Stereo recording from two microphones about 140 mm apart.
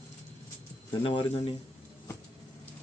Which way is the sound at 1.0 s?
40° left (ahead or behind).